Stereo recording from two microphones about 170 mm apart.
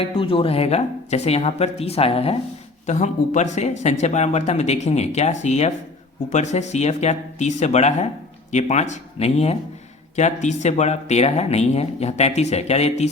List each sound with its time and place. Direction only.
0.0 s speech: 35° left (ahead or behind)